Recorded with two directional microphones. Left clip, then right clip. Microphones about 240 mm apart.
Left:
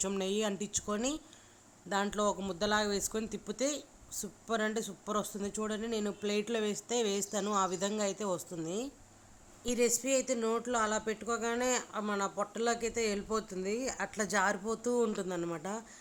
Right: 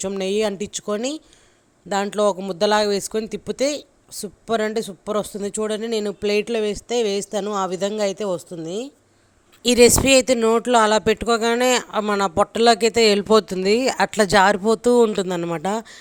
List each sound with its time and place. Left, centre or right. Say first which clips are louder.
0.0 s speech: right 12 dB; right
9.6 s speech: right 18 dB; right